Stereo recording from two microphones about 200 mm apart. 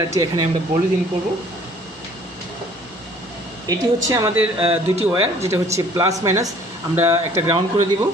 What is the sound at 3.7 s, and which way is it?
Speech, 15° right (ahead or behind).